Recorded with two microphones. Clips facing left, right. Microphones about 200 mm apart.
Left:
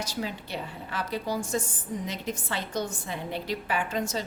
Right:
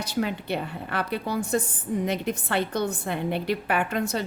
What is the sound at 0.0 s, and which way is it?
A woman's voice, 60° right (ahead or behind).